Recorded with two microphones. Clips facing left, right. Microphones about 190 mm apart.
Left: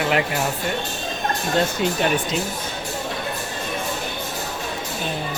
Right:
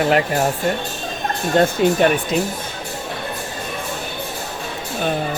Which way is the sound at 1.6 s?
55° right (ahead or behind).